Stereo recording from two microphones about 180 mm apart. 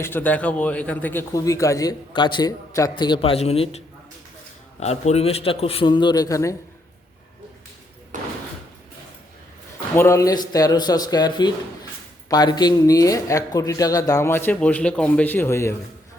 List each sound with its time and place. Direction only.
0.0 s a man's voice: 10° left (ahead or behind)
8.1 s door: 45° right (ahead or behind)
9.9 s a man's voice: 15° left (ahead or behind)